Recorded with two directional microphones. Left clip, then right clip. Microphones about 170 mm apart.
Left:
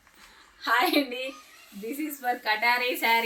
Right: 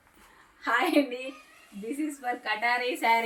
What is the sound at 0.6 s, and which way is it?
Speech, centre (ahead or behind).